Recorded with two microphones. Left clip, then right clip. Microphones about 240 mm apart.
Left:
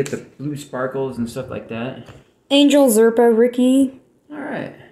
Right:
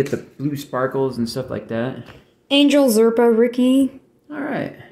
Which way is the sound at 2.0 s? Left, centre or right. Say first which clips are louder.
Left 1 dB; centre.